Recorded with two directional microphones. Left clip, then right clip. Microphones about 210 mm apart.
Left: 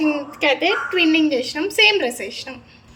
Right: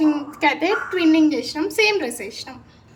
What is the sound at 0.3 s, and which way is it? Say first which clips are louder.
A woman's voice: left 1 dB; 10° right (ahead or behind).